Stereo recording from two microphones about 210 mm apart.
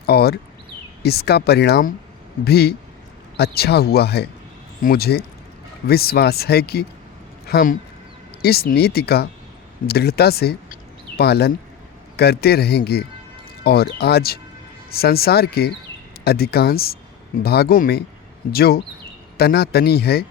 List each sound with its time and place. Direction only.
0.0 s speech: 50° left (ahead or behind)